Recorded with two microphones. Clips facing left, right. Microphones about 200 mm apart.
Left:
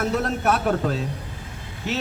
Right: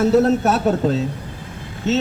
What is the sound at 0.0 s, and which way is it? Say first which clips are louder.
Speech: right 8 dB; 25° right (ahead or behind).